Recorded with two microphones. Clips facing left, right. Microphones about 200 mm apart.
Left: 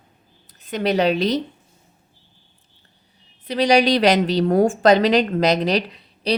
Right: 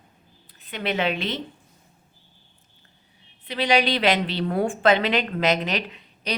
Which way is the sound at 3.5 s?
40° left (ahead or behind).